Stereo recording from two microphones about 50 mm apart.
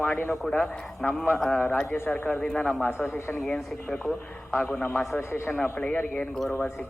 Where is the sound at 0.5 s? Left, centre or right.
Left.